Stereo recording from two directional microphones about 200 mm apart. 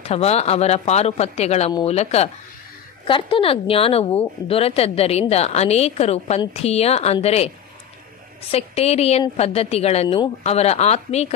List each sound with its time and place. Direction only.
0.0 s a woman's voice: 30° left (ahead or behind)